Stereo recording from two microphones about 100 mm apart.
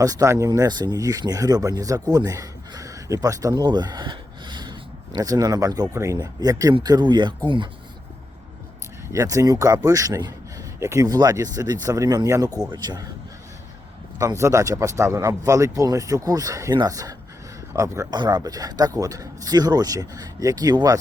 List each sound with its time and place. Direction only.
0.0 s speech: 35° right (ahead or behind)
5.9 s speech: 25° right (ahead or behind)
6.1 s speech: 40° right (ahead or behind); by 7.7 s 55° right (ahead or behind)
9.1 s a man's voice: 35° right (ahead or behind)
10.8 s speech: 30° right (ahead or behind)
11.1 s speech: 40° right (ahead or behind)
14.2 s speech: 35° right (ahead or behind)
18.1 s speech: 45° right (ahead or behind)